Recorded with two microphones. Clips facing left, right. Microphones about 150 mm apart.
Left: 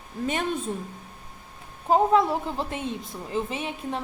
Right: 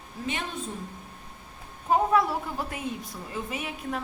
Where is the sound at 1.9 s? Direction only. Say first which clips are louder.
Left 3 dB; 25° left (ahead or behind).